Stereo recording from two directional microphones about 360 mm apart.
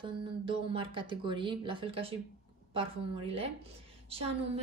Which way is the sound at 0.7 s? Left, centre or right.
Centre.